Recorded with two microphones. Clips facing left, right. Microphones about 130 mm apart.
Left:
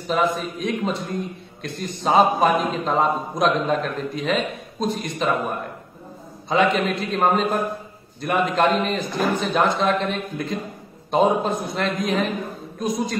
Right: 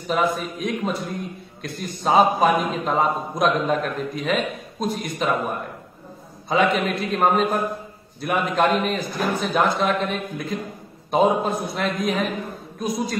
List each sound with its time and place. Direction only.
0.1 s a man's voice: centre (ahead or behind)